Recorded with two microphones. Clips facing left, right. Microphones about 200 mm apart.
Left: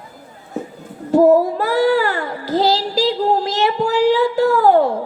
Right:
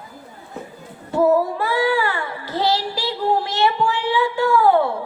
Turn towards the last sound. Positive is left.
turn(degrees=40)  # may be behind; listen again after turning